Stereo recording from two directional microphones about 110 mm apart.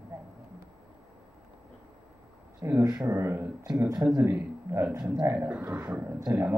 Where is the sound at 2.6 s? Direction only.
25° right (ahead or behind).